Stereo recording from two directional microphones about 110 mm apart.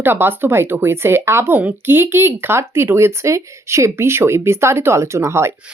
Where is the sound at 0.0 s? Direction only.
20° right (ahead or behind).